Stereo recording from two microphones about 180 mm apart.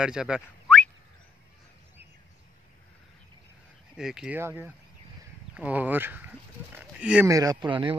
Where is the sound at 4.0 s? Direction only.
5° right (ahead or behind).